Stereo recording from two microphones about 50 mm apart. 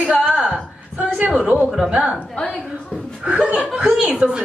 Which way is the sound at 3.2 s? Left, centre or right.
Right.